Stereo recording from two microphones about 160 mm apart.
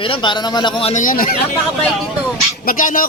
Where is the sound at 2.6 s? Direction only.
55° left (ahead or behind).